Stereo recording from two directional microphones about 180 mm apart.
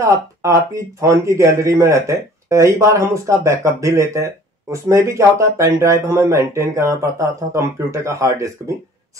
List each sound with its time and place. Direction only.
0.0 s speech: 15° right (ahead or behind)